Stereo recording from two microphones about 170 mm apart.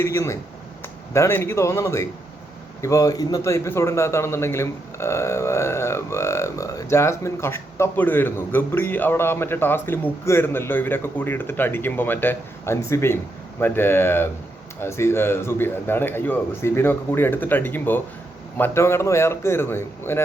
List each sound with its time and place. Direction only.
0.0 s a man's voice: 15° left (ahead or behind)